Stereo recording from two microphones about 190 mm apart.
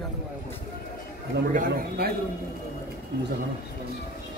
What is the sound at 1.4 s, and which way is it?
Speech, 55° right (ahead or behind).